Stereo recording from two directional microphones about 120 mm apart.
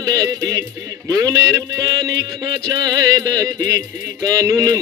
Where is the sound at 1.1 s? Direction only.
30° right (ahead or behind).